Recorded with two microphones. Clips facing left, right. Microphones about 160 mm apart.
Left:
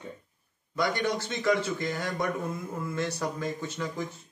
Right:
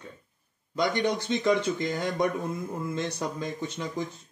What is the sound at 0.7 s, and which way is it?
A man's voice, 20° right (ahead or behind).